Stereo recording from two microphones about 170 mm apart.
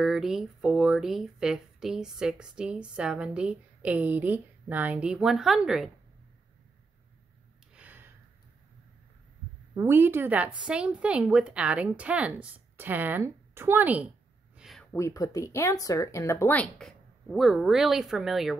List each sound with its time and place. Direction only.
0.0 s speech: centre (ahead or behind)
7.7 s gasp: 10° right (ahead or behind)
9.8 s a woman's voice: 15° right (ahead or behind)
14.6 s a sound: centre (ahead or behind)
14.9 s speech: 15° left (ahead or behind); by 18.6 s centre (ahead or behind)